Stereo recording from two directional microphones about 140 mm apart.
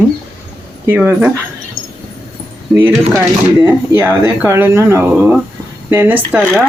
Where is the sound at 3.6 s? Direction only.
20° right (ahead or behind).